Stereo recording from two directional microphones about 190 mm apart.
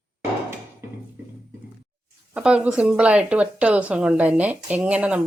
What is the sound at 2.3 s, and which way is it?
Speech, 5° right (ahead or behind).